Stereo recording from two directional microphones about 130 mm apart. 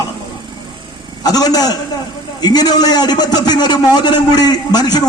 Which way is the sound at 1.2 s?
30° left (ahead or behind).